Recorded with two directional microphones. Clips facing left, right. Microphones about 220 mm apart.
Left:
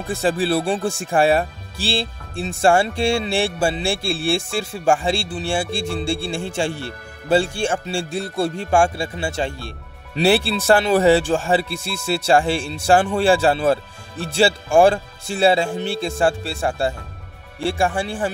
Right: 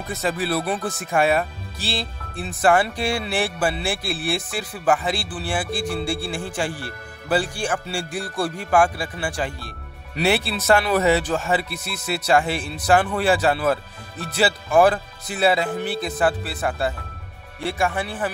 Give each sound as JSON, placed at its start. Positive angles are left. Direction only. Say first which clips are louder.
{"t": 0.0, "sound": "speech", "louder": "left 5 dB", "side_deg": 30}